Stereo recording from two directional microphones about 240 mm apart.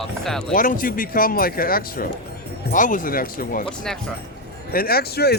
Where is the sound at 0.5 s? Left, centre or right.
Left.